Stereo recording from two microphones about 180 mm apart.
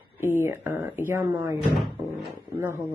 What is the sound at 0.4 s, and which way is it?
Speech, 10° right (ahead or behind).